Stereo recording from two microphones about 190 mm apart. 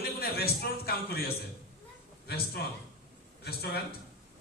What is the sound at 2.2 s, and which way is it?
A man's voice, 55° left (ahead or behind).